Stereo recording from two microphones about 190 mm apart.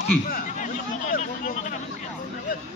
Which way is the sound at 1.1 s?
45° left (ahead or behind).